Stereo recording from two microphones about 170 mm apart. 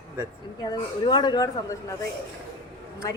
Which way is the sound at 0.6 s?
25° left (ahead or behind).